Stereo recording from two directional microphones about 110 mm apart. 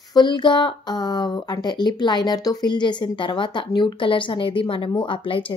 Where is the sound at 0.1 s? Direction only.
45° left (ahead or behind).